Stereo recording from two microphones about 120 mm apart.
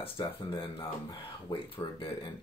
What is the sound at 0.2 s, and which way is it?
Speech, 45° left (ahead or behind).